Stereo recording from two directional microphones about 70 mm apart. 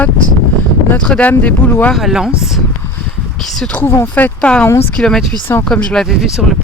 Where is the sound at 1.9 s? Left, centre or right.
Centre.